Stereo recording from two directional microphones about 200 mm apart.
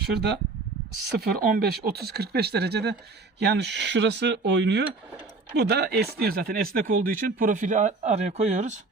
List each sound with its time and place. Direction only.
0.0 s speech: 55° right (ahead or behind); by 8.8 s 35° right (ahead or behind)